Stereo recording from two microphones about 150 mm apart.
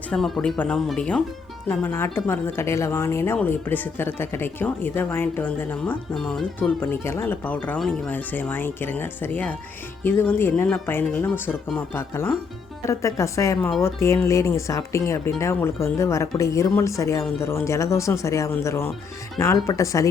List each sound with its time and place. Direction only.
0.1 s speech: 5° left (ahead or behind); by 20.1 s 20° left (ahead or behind)